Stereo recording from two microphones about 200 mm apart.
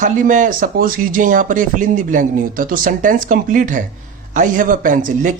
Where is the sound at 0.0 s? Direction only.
40° right (ahead or behind).